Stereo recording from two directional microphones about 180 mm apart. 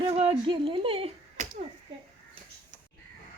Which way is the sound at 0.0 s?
30° right (ahead or behind).